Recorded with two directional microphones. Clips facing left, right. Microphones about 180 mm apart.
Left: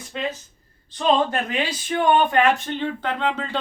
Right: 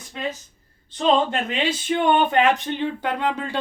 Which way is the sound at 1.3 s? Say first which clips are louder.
Right 1 dB; 25° right (ahead or behind).